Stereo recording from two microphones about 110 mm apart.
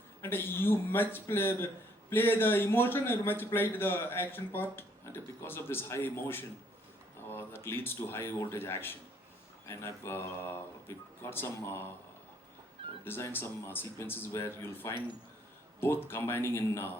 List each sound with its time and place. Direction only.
0.2 s a man's voice: 20° left (ahead or behind)
13.1 s a man's voice: 20° left (ahead or behind)